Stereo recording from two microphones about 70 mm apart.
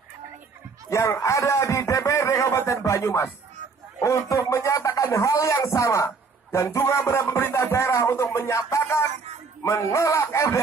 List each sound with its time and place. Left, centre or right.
0.8 s speech: left
8.8 s a sound: left
9.6 s speech: left